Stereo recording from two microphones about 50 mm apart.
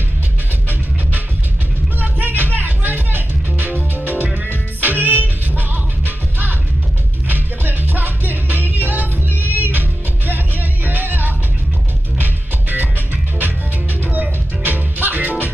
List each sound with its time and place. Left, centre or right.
2.0 s music: right